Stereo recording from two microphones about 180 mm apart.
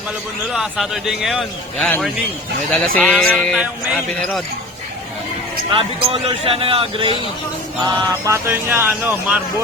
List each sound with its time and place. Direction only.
0.5 s a man's voice: centre (ahead or behind)
5.7 s speech: 30° right (ahead or behind)
7.9 s speech: 15° right (ahead or behind)